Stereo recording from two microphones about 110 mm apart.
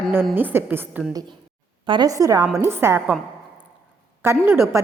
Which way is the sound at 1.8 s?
45° right (ahead or behind).